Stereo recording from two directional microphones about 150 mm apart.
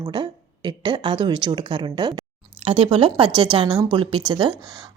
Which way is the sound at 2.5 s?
45° right (ahead or behind).